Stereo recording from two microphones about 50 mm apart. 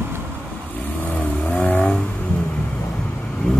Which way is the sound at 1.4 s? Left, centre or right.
Left.